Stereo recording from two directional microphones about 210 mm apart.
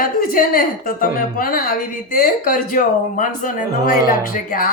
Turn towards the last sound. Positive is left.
turn(degrees=45)  # may be behind; listen again after turning